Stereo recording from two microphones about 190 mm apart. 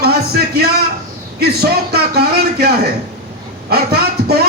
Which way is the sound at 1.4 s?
55° right (ahead or behind).